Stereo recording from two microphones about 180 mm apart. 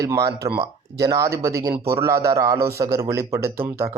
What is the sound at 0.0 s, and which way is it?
A man's voice, 20° right (ahead or behind).